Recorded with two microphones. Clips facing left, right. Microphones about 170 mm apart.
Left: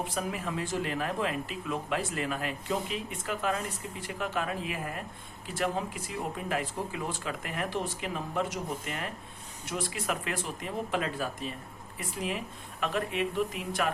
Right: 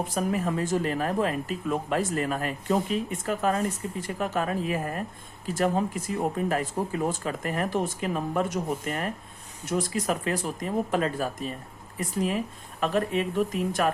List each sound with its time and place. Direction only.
0.0 s speech: 45° right (ahead or behind)